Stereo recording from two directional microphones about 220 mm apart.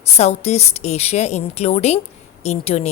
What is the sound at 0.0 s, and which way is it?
A woman's voice, 30° left (ahead or behind).